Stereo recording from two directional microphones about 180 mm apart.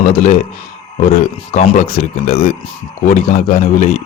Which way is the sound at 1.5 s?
40° left (ahead or behind).